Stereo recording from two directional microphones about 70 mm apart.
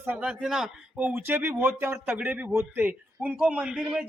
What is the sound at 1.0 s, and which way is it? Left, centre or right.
Speech, right.